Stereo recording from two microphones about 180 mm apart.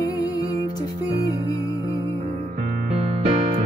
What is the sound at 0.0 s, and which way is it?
Music, 20° left (ahead or behind).